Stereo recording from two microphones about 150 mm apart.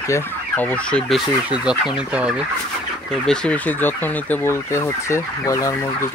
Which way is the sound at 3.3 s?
10° left (ahead or behind).